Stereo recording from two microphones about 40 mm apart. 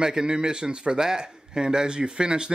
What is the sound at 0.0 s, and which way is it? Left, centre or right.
Speech, centre.